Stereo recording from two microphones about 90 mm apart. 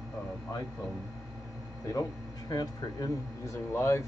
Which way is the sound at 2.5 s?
45° left (ahead or behind).